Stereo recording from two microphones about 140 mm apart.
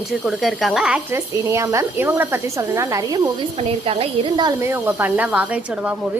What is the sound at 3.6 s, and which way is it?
Speech, 40° right (ahead or behind).